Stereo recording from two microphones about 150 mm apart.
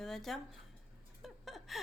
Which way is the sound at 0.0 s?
Centre (ahead or behind).